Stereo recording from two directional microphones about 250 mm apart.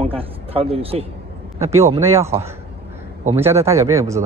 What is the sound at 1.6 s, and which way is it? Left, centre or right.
Speech, centre.